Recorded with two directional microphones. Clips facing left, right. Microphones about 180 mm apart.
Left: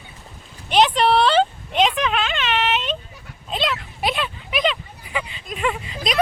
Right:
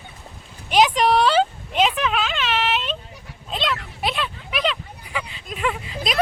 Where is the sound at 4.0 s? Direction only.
Centre (ahead or behind).